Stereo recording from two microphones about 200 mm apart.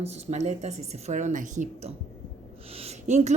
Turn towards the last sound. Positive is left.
turn(degrees=-35)  # may be behind; listen again after turning